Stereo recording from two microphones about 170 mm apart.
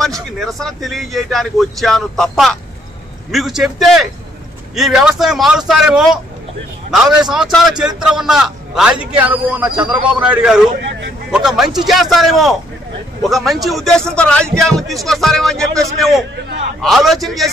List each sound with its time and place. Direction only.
0.4 s speech: centre (ahead or behind)
7.2 s a man's voice: centre (ahead or behind)